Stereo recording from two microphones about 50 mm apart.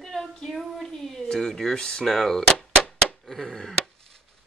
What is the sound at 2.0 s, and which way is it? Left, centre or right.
Speech, centre.